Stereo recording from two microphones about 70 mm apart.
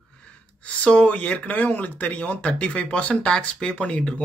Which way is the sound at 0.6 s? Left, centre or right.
Centre.